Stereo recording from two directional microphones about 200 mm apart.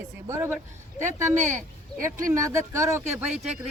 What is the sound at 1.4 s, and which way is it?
Speech, 35° right (ahead or behind).